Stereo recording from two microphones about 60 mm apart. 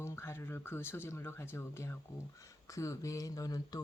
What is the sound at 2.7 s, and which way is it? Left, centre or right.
Speech, left.